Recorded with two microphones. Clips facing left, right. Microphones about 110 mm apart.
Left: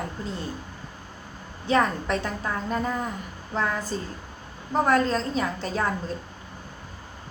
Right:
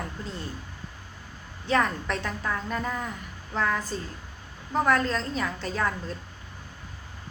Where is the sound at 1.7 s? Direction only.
20° left (ahead or behind).